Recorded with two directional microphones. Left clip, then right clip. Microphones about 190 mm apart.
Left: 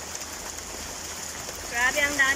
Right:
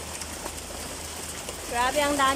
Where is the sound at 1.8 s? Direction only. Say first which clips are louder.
Left 1 dB; 15° right (ahead or behind).